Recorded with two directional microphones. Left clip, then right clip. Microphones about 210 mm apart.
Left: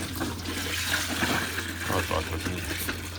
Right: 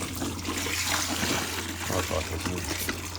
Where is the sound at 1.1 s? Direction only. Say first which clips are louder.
Left 1 dB; centre (ahead or behind).